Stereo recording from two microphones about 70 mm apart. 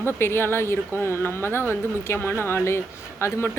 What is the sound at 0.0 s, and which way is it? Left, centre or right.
Speech, left.